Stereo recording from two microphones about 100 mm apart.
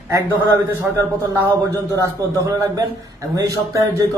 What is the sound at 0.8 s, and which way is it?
A man's voice, 30° right (ahead or behind).